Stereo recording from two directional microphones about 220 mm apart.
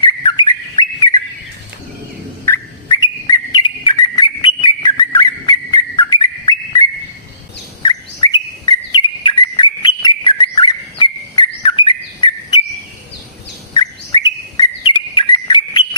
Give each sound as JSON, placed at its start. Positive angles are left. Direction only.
{"t": 0.0, "sound": "bird", "side_deg": 20}
{"t": 2.4, "sound": "bird", "side_deg": 15}
{"t": 7.8, "sound": "bird", "side_deg": 20}
{"t": 13.7, "sound": "bird", "side_deg": 20}